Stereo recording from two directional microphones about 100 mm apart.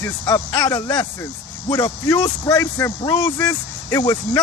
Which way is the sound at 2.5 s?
30° left (ahead or behind).